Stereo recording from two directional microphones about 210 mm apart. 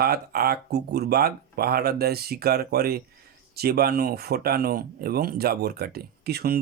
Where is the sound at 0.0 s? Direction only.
50° right (ahead or behind).